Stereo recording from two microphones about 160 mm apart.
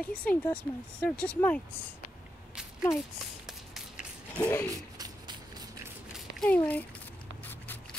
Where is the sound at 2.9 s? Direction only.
15° left (ahead or behind).